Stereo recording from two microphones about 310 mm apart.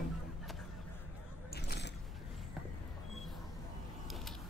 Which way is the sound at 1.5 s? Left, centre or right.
Left.